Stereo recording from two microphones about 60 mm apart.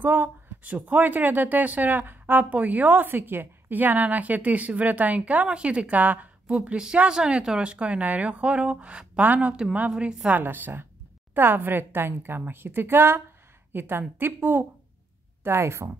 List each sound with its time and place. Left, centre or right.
0.0 s a woman's voice: right; by 10.3 s centre
10.3 s a woman's voice: right
15.4 s speech: right